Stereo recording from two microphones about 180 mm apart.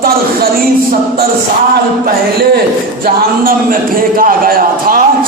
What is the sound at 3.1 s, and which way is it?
A man's voice, 50° right (ahead or behind).